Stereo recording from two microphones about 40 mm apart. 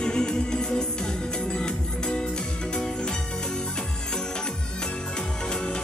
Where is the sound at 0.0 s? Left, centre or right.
Centre.